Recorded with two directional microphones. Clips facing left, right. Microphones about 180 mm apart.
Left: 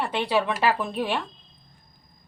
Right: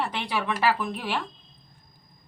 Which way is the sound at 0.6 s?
25° left (ahead or behind).